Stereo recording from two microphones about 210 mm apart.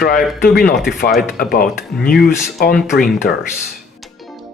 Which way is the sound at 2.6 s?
45° left (ahead or behind).